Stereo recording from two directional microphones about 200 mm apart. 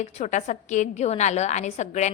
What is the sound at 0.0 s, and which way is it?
A woman's voice, 35° left (ahead or behind).